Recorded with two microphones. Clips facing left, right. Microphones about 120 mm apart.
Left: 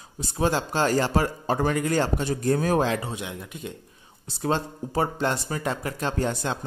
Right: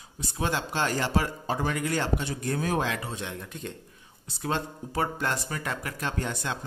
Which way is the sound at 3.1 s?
10° left (ahead or behind).